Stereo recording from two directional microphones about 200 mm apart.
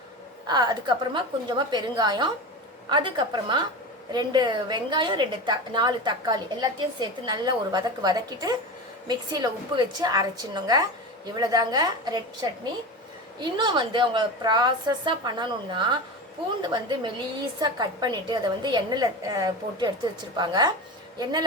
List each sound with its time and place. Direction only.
0.4 s a woman's voice: 20° right (ahead or behind)